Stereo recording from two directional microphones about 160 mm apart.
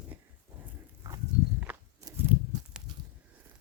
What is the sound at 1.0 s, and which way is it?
Walk, 25° right (ahead or behind).